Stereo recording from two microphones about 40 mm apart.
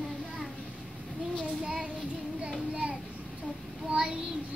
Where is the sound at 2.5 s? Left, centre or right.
Right.